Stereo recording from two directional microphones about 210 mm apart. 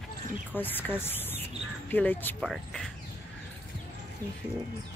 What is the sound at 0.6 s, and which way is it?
Speech, 10° left (ahead or behind).